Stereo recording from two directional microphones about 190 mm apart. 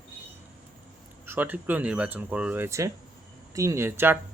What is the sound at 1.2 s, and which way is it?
Speech, 10° right (ahead or behind).